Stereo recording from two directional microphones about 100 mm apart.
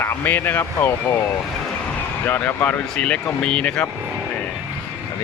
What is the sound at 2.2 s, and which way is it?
Speech, 20° left (ahead or behind).